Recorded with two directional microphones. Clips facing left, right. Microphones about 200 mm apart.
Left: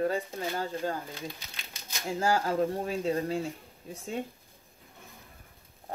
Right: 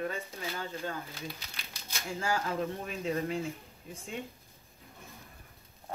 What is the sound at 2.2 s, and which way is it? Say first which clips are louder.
Speech: left 6 dB; 40° left (ahead or behind).